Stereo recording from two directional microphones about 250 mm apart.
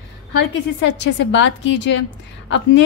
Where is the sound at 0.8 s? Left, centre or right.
Left.